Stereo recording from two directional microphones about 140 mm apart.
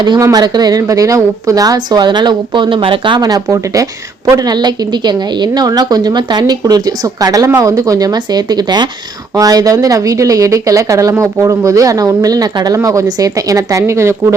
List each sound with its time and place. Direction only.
0.0 s a woman's voice: 30° right (ahead or behind)